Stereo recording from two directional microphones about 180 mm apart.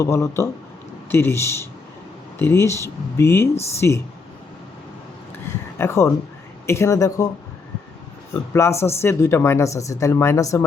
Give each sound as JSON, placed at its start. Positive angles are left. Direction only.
{"t": 0.0, "sound": "speech", "side_deg": 15}
{"t": 5.7, "sound": "speech", "side_deg": 15}
{"t": 8.3, "sound": "speech", "side_deg": 15}